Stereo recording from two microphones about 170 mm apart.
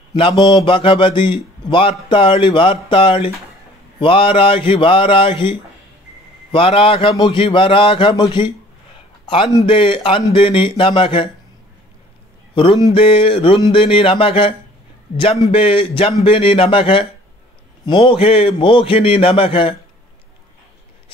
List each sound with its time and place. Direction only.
0.1 s mantra: 30° left (ahead or behind)
0.6 s a man's voice: 30° left (ahead or behind)
12.5 s speech: 25° left (ahead or behind)
15.5 s speech: 35° left (ahead or behind)